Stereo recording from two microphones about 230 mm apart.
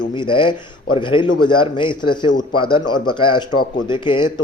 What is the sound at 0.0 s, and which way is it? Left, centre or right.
A man's voice, centre.